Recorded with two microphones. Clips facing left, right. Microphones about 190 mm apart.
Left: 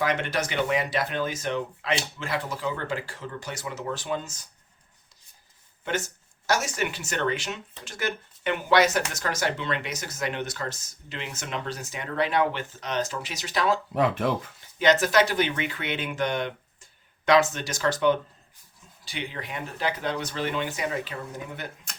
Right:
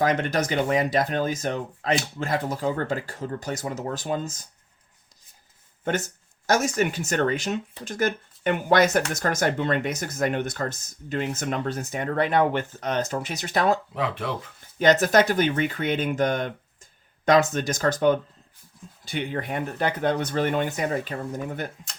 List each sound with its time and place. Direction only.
0.0 s speech: 45° right (ahead or behind)
6.5 s speech: 45° right (ahead or behind)
13.9 s speech: 50° left (ahead or behind)
14.8 s speech: 45° right (ahead or behind)